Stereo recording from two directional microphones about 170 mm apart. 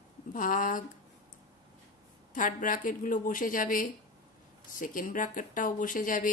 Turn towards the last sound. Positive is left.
turn(degrees=50)  # may be behind; listen again after turning